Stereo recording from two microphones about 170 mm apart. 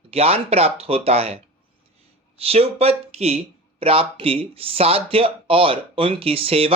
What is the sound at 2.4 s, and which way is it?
Speech, 35° right (ahead or behind).